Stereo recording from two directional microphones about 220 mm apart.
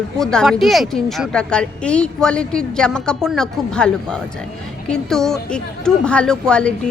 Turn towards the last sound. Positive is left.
turn(degrees=5)  # may be behind; listen again after turning